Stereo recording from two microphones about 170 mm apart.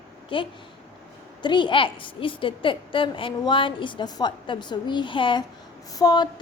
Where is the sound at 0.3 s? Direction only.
30° left (ahead or behind).